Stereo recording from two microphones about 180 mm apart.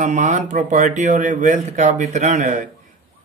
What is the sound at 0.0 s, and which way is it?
Speech, 40° right (ahead or behind).